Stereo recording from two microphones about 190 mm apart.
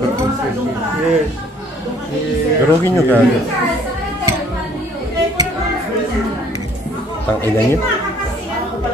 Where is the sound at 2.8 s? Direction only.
15° left (ahead or behind).